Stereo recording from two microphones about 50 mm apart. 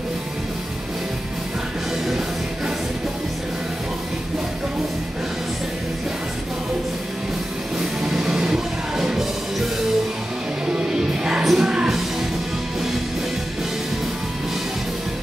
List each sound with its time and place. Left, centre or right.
2.0 s music: centre
7.8 s music: centre
10.7 s music: centre